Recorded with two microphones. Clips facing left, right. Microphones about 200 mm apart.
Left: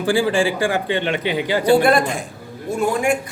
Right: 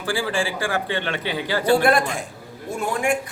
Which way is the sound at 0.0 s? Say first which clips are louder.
Left 7 dB; 20° left (ahead or behind).